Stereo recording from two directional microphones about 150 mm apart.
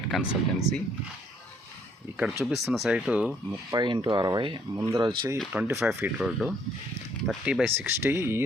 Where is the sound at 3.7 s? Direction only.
30° right (ahead or behind).